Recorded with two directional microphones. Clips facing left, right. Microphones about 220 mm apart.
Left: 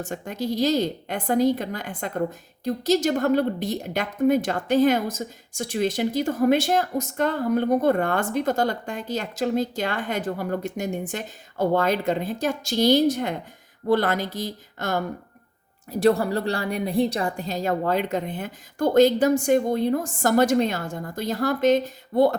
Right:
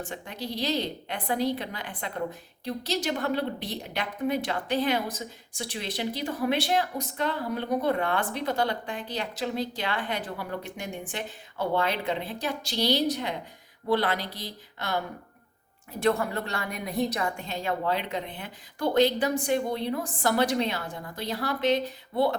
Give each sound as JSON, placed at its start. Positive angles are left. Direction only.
{"t": 0.0, "sound": "a woman's voice", "side_deg": 45}